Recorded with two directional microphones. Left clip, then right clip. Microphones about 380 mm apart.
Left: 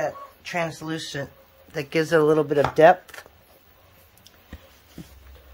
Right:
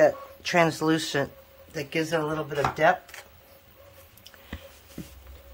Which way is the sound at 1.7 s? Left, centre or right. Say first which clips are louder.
Left 6 dB; centre.